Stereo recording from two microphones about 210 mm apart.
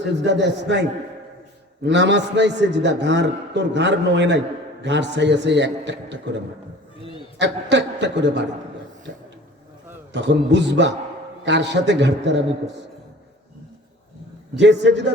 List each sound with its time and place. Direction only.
0.0 s a man's voice: 55° right (ahead or behind)
7.3 s a man's voice: 55° right (ahead or behind)
10.1 s a man's voice: 55° right (ahead or behind)
14.5 s a man's voice: 55° right (ahead or behind)